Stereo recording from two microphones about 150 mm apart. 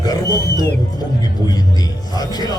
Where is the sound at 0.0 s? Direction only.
25° left (ahead or behind).